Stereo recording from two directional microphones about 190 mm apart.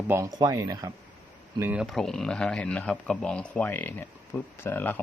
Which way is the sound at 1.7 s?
Centre (ahead or behind).